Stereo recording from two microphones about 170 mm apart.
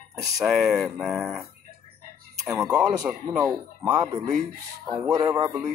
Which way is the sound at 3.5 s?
20° right (ahead or behind).